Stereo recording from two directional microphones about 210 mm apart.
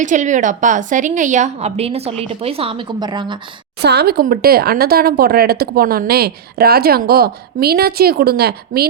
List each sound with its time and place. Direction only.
0.0 s a woman's voice: 35° right (ahead or behind)
3.8 s speech: 50° right (ahead or behind)